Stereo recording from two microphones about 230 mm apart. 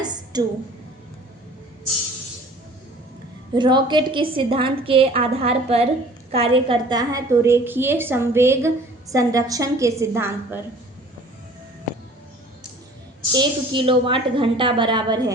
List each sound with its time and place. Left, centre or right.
0.0 s a sound: centre
3.5 s a woman's voice: centre
13.3 s a woman's voice: right